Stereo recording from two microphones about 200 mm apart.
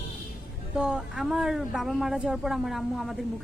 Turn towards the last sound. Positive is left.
turn(degrees=0)  # may be behind; listen again after turning